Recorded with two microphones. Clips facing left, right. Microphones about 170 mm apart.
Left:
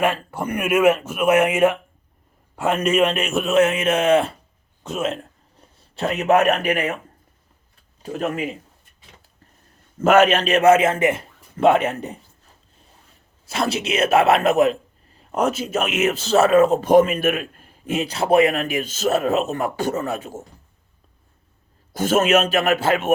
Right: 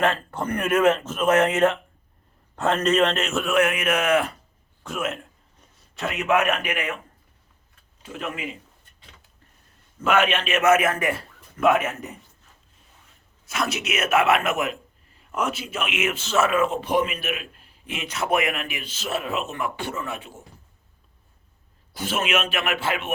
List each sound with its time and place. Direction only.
0.0 s a man's voice: 10° left (ahead or behind); by 6.9 s 35° left (ahead or behind)
8.0 s speech: 40° left (ahead or behind)
10.0 s a man's voice: 40° left (ahead or behind)
13.4 s a man's voice: 30° left (ahead or behind)
21.9 s a man's voice: 45° left (ahead or behind)